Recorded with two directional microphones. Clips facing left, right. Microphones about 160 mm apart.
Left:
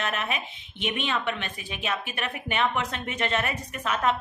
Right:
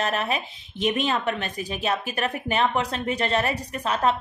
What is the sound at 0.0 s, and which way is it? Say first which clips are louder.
A woman's voice: right 4 dB; 35° right (ahead or behind).